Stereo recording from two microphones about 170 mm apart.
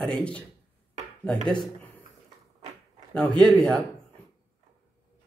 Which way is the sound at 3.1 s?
5° left (ahead or behind).